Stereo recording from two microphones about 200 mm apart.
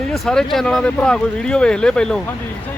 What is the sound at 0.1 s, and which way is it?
Speech, 5° left (ahead or behind).